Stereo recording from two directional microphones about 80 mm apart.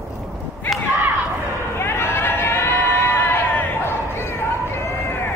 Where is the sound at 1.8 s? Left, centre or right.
Left.